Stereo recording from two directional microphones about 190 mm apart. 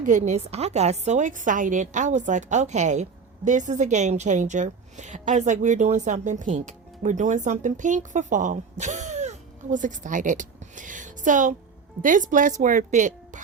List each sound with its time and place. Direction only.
0.0 s a woman's voice: 40° right (ahead or behind)